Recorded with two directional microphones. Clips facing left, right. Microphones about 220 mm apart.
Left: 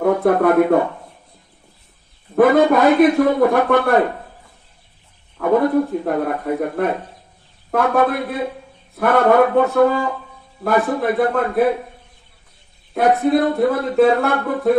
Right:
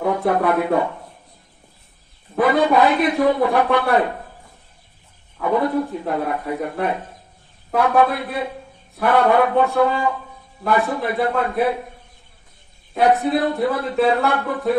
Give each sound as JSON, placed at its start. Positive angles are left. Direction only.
{"t": 0.0, "sound": "speech", "side_deg": 50}
{"t": 2.3, "sound": "speech", "side_deg": 50}
{"t": 5.4, "sound": "speech", "side_deg": 50}
{"t": 12.9, "sound": "speech", "side_deg": 50}